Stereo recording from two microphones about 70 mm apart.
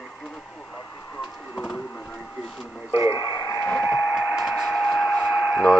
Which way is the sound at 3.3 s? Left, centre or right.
Left.